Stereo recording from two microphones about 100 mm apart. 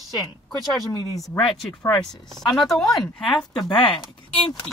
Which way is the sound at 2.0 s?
5° left (ahead or behind).